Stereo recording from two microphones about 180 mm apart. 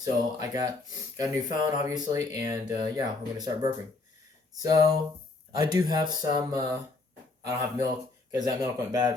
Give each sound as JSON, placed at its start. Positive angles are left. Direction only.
{"t": 0.0, "sound": "speech", "side_deg": -20}